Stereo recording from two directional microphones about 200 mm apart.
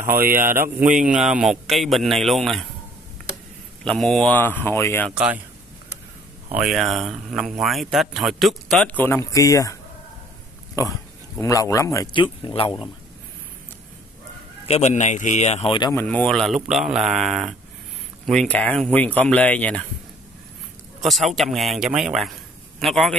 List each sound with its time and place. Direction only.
0.0 s speech: 10° right (ahead or behind)
3.8 s a man's voice: 5° left (ahead or behind)
5.1 s speech: 5° right (ahead or behind)
6.5 s speech: 5° right (ahead or behind); by 9.8 s 15° left (ahead or behind)
10.8 s a man's voice: 15° left (ahead or behind)
14.7 s a man's voice: 35° left (ahead or behind)
15.9 s speech: 10° left (ahead or behind)
21.0 s speech: centre (ahead or behind)